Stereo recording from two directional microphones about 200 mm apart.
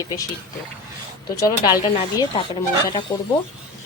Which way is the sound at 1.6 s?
20° left (ahead or behind).